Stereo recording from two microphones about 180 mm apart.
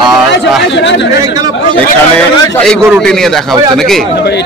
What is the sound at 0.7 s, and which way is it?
Speech, 80° left.